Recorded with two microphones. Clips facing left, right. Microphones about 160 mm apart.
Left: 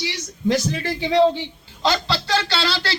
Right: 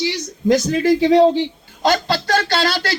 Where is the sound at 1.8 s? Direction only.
50° right (ahead or behind).